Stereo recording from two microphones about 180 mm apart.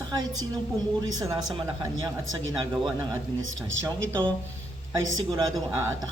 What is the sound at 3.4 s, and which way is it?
Speech, 90° right.